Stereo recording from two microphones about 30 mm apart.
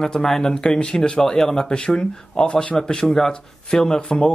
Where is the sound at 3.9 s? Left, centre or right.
Left.